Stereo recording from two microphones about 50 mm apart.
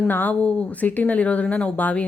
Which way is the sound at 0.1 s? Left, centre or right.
Left.